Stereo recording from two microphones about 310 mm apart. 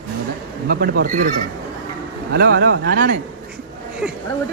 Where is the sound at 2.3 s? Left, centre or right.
Right.